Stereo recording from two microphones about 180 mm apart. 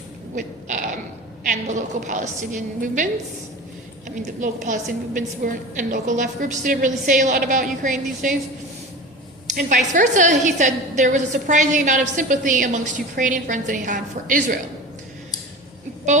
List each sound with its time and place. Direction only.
0.3 s a sound: 45° right (ahead or behind)
1.5 s a woman's voice: 45° right (ahead or behind)
4.4 s a woman's voice: 45° right (ahead or behind)
9.5 s a woman's voice: 45° right (ahead or behind)